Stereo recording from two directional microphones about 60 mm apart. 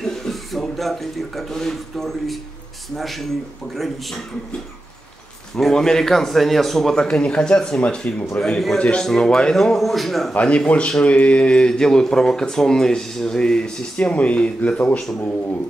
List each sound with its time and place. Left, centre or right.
0.0 s speech: centre
3.7 s speech: centre
5.6 s speech: centre
10.3 s speech: left